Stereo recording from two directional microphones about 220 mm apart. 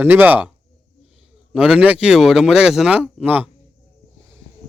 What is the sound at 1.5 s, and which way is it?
Speech, 5° right (ahead or behind).